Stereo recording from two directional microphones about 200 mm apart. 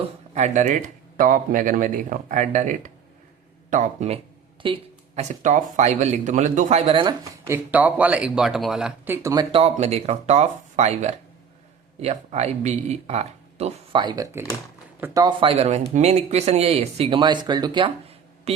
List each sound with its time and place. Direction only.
0.3 s speech: 35° right (ahead or behind)
4.6 s a sound: 25° right (ahead or behind)
5.4 s a man's voice: 40° right (ahead or behind)